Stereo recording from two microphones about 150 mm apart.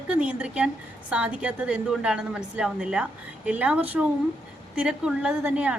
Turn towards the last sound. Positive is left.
turn(degrees=-10)  # may be behind; listen again after turning